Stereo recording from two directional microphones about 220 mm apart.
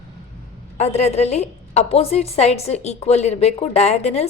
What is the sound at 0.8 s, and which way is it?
A woman's voice, 30° left (ahead or behind).